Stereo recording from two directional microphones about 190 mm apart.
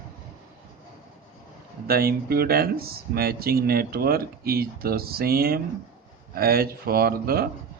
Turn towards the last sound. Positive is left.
turn(degrees=-50)  # may be behind; listen again after turning